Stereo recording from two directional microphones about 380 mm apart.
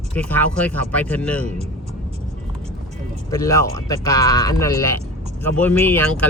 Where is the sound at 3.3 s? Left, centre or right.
Centre.